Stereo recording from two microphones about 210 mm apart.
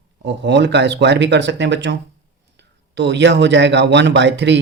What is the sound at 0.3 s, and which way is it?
Speech, 55° right (ahead or behind).